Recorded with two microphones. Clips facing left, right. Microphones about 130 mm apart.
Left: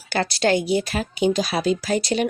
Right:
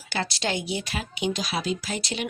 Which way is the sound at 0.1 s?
45° left (ahead or behind).